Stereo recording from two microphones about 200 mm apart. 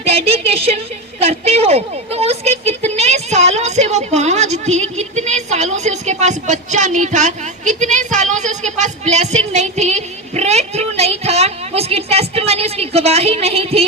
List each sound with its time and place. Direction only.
0.0 s a woman's voice: 30° right (ahead or behind)